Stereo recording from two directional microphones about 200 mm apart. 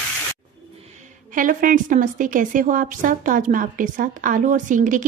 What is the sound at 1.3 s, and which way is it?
A woman's voice, 40° right (ahead or behind).